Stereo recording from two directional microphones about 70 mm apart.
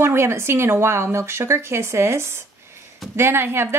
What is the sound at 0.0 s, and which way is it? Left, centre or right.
Speech, right.